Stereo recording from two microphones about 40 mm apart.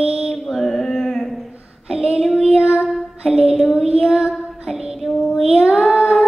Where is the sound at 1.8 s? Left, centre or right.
Right.